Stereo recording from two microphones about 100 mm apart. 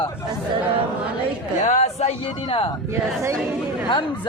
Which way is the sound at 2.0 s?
80° left.